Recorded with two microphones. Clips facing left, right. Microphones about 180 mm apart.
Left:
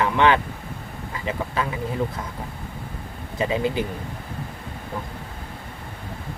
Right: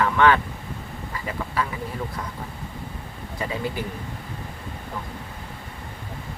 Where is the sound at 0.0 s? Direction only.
20° left (ahead or behind).